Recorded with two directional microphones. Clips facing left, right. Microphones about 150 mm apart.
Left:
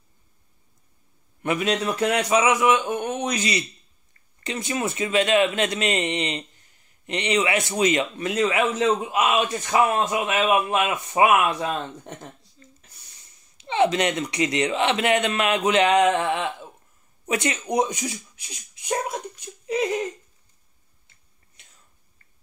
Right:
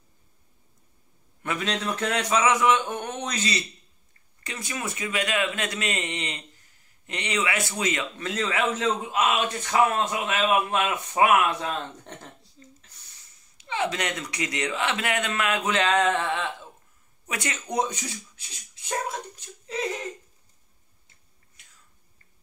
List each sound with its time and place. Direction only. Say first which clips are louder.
1.4 s a man's voice: left 5 dB; 15° left (ahead or behind)
12.9 s a sound: left 1 dB; 10° left (ahead or behind)
13.6 s a man's voice: left 7 dB; 25° left (ahead or behind)
21.6 s whispering: left 3 dB; 25° left (ahead or behind)